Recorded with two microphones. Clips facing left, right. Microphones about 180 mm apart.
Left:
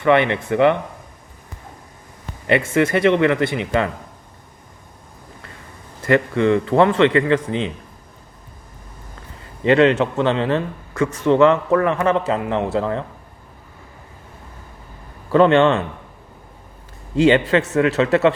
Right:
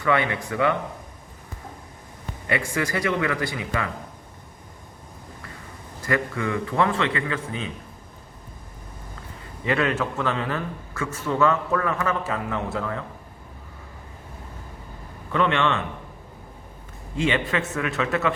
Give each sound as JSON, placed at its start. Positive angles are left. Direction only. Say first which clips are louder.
{"t": 0.0, "sound": "a man's voice", "louder": "left 7 dB", "side_deg": 25}
{"t": 2.6, "sound": "a man's voice", "louder": "left 9 dB", "side_deg": 25}
{"t": 6.1, "sound": "a man's voice", "louder": "left 9 dB", "side_deg": 25}
{"t": 9.6, "sound": "a man's voice", "louder": "left 9 dB", "side_deg": 25}
{"t": 15.3, "sound": "a man's voice", "louder": "left 9 dB", "side_deg": 35}
{"t": 17.2, "sound": "a man's voice", "louder": "left 9 dB", "side_deg": 30}